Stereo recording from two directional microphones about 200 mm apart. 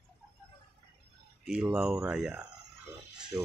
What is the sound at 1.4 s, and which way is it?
Speech, 5° right (ahead or behind).